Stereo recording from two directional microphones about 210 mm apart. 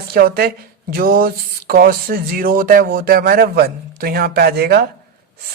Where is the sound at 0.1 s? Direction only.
45° right (ahead or behind).